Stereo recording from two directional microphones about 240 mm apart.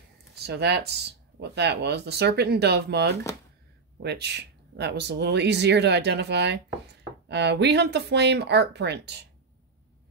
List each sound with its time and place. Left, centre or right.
0.4 s speech: right